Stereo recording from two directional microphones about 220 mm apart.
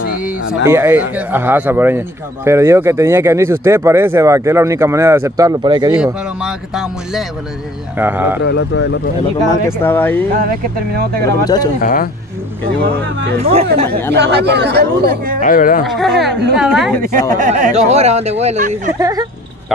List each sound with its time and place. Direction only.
0.7 s a man's voice: 10° right (ahead or behind)
6.4 s music: centre (ahead or behind)
8.0 s a man's voice: 10° right (ahead or behind)
8.5 s speech: 55° left (ahead or behind)
9.7 s speech: 10° left (ahead or behind)
10.3 s speech: 40° right (ahead or behind)
11.4 s speech: 15° left (ahead or behind)
11.8 s speech: 40° left (ahead or behind)
13.4 s speech: 25° right (ahead or behind)
14.1 s speech: 50° right (ahead or behind)
15.4 s speech: 40° left (ahead or behind)
15.9 s music: centre (ahead or behind)
17.4 s speech: 35° right (ahead or behind)
18.9 s a man's voice: 15° right (ahead or behind)